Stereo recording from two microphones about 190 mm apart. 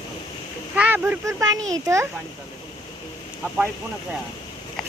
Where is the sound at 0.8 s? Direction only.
10° right (ahead or behind).